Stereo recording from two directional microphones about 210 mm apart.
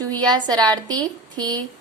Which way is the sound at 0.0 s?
20° right (ahead or behind).